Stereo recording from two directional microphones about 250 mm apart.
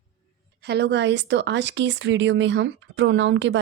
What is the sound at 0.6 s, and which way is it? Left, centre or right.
A woman's voice, right.